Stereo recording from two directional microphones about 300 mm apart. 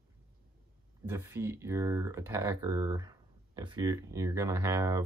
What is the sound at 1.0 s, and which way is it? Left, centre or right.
Speech, centre.